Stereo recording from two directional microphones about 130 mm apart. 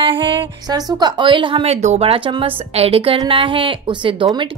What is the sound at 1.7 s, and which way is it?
A woman's voice, 60° right (ahead or behind).